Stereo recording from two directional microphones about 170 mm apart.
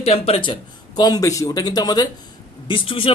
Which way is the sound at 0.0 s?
35° left (ahead or behind).